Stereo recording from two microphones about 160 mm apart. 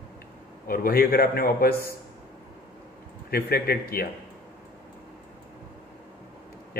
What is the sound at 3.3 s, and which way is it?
Speech, 70° left (ahead or behind).